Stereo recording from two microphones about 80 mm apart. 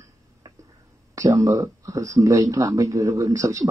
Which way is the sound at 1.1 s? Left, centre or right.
Right.